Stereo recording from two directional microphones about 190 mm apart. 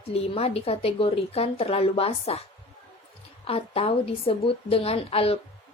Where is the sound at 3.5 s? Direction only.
30° left (ahead or behind).